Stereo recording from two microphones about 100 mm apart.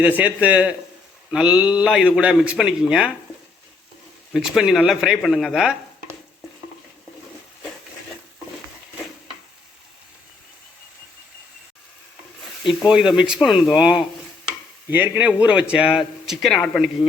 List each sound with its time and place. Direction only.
0.0 s speech: 15° right (ahead or behind)
4.3 s a man's voice: centre (ahead or behind)
12.9 s a man's voice: 10° right (ahead or behind)